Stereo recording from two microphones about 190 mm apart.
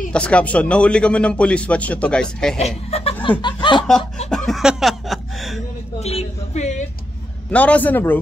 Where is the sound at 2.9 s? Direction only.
30° left (ahead or behind).